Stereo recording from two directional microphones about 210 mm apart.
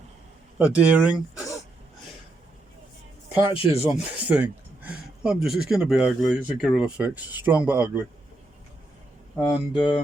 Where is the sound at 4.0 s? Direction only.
5° right (ahead or behind).